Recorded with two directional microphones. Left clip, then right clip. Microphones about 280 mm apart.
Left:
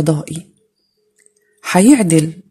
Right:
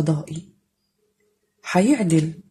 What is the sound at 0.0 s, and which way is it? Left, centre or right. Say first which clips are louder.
Speech: left 8 dB; left.